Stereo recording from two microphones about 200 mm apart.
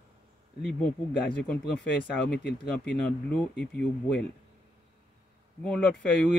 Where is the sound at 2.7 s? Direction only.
5° left (ahead or behind).